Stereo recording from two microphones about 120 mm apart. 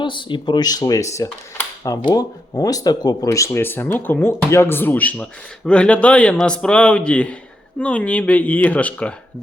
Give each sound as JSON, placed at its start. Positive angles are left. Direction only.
{"t": 0.0, "sound": "speech", "side_deg": 40}